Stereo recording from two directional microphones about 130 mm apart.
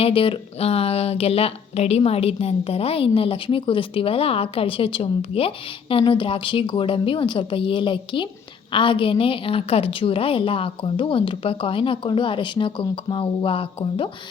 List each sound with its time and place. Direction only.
0.0 s speech: 45° left (ahead or behind)